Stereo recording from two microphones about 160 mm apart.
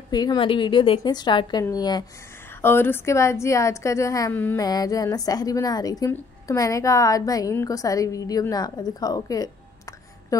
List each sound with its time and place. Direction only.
0.1 s a woman's voice: 25° left (ahead or behind)
2.5 s a woman's voice: 15° left (ahead or behind)
4.6 s a woman's voice: 25° left (ahead or behind)